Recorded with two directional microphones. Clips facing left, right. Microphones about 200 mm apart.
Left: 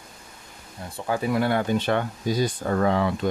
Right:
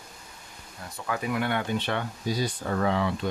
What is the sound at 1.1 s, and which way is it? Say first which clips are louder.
Speech: left 5 dB; 30° left (ahead or behind).